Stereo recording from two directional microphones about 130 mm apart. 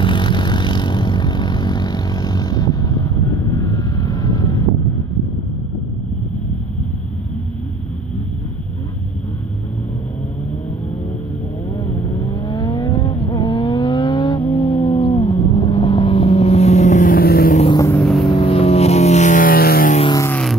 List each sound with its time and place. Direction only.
0.0 s vehicle: 35° left (ahead or behind)
12.2 s vehicle: 35° left (ahead or behind)
14.8 s cat: 40° left (ahead or behind)
15.3 s vehicle: 40° left (ahead or behind); by 17.6 s 90° left
17.9 s vehicle: 5° left (ahead or behind)
18.3 s music: 45° left (ahead or behind); by 20.0 s 90° left